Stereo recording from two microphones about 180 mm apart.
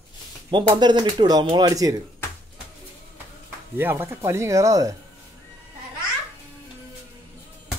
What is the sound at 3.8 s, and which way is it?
Speech, 10° right (ahead or behind).